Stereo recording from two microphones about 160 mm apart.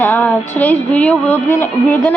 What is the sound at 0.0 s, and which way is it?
A woman's voice, 10° left (ahead or behind).